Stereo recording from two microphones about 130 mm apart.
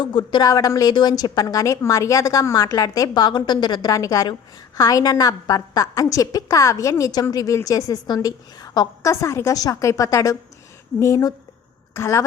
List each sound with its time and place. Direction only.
0.0 s a woman's voice: 35° left (ahead or behind)